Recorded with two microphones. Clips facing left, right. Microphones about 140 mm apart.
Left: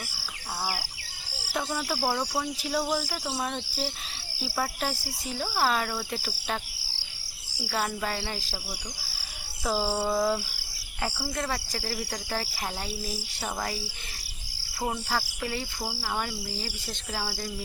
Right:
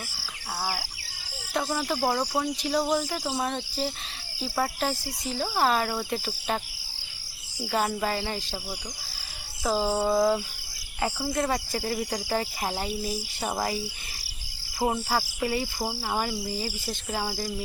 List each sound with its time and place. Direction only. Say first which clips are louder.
2.1 s cricket: right 3 dB; 5° right (ahead or behind)
5.4 s cricket: right 2 dB; centre (ahead or behind)
7.7 s cricket: right 4 dB; 5° right (ahead or behind)
9.6 s cricket: right 3 dB; centre (ahead or behind)
11.9 s cricket: right 5 dB; centre (ahead or behind)
13.7 s cricket: right 4 dB; centre (ahead or behind)
14.8 s cricket: right 4 dB; 20° right (ahead or behind)
15.4 s speech: right 5 dB; 10° right (ahead or behind)